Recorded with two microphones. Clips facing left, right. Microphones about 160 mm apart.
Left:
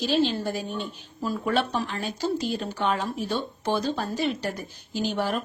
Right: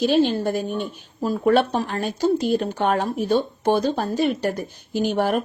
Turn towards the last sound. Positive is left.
turn(degrees=-55)  # may be behind; listen again after turning